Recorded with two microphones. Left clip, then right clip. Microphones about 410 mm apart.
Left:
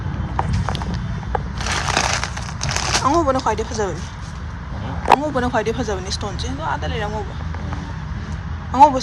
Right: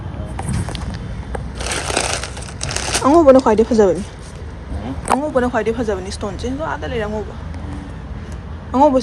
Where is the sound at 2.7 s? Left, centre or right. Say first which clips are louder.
Right 4 dB; centre.